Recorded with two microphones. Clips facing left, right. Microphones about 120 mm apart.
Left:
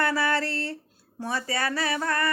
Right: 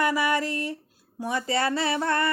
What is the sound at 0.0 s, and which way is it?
Speech, 15° right (ahead or behind).